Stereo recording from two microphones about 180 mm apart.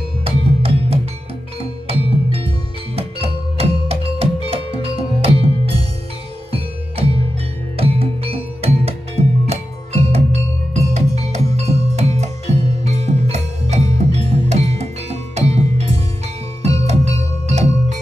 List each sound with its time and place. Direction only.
0.2 s music: 30° right (ahead or behind)